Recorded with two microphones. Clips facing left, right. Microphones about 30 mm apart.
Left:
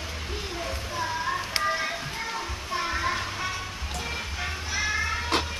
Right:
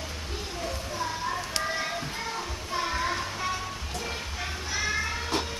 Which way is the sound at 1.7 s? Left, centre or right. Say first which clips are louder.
Left 2 dB; centre.